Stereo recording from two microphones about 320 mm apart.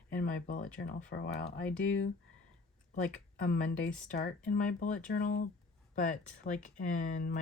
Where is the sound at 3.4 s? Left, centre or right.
Left.